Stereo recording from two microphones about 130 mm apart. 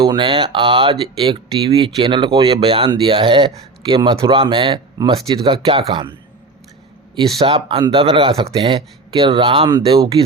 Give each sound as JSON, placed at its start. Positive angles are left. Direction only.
{"t": 0.0, "sound": "speech", "side_deg": -40}
{"t": 7.4, "sound": "speech", "side_deg": -40}